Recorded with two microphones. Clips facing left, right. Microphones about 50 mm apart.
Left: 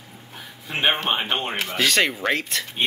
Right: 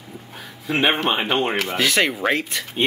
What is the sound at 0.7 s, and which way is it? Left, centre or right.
Speech, right.